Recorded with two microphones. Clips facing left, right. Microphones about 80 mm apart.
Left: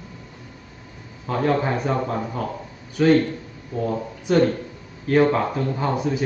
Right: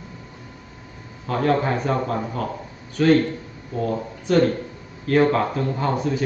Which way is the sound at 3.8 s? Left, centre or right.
Centre.